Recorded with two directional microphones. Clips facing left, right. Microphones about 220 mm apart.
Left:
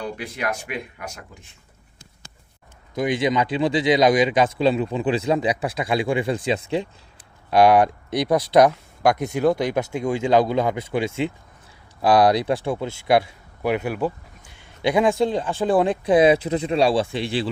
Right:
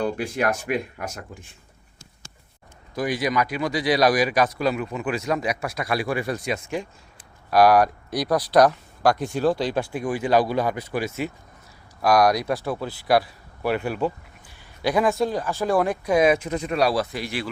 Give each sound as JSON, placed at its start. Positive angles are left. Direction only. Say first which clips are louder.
{"t": 0.0, "sound": "speech", "louder": "right 4 dB", "side_deg": -50}
{"t": 2.9, "sound": "speech", "louder": "left 3 dB", "side_deg": 25}
{"t": 14.5, "sound": "speech", "louder": "left 2 dB", "side_deg": 25}